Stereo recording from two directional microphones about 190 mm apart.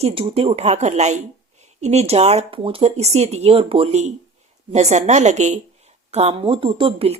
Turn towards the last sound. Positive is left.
turn(degrees=-30)  # may be behind; listen again after turning